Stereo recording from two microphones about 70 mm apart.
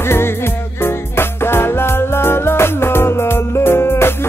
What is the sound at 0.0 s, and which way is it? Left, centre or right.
Music, left.